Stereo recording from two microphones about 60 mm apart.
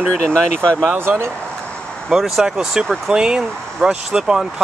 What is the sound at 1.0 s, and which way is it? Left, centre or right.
Speech, right.